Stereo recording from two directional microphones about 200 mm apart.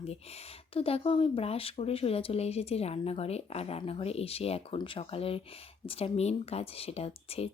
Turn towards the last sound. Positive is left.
turn(degrees=30)  # may be behind; listen again after turning